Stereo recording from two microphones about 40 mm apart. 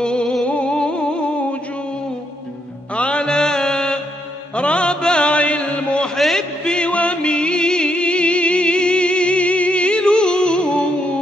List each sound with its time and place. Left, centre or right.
0.0 s a sound: centre
0.5 s music: left
2.9 s music: left
4.6 s mantra: left
6.1 s a sound: centre
6.6 s music: left
6.9 s music: left